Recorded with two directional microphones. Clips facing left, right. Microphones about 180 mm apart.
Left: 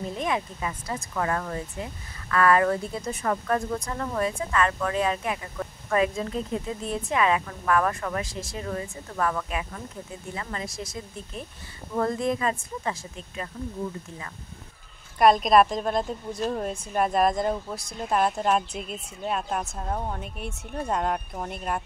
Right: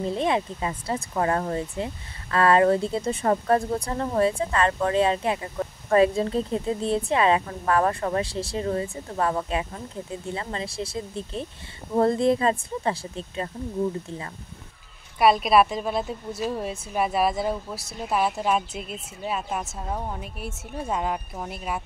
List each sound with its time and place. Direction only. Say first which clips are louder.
0.1 s speech: right 3 dB; 30° right (ahead or behind)
15.1 s speech: even; 5° right (ahead or behind)